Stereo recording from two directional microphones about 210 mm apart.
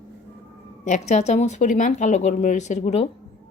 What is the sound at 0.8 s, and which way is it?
Speech, 35° left (ahead or behind).